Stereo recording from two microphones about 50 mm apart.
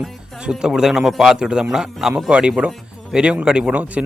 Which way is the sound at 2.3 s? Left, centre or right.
Right.